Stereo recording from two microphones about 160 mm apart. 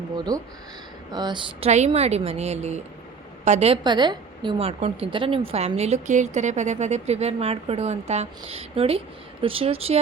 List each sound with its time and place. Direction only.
0.3 s speech: 25° right (ahead or behind)
1.7 s a woman's voice: 45° right (ahead or behind)
3.8 s a woman's voice: 25° right (ahead or behind)